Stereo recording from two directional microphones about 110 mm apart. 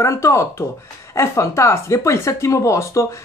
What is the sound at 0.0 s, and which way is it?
Speech, 30° left (ahead or behind).